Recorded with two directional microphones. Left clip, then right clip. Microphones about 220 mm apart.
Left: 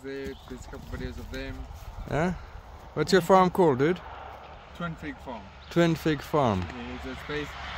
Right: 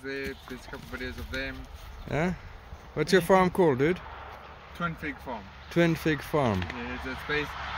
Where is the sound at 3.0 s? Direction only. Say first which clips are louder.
Left 2 dB; 10° left (ahead or behind).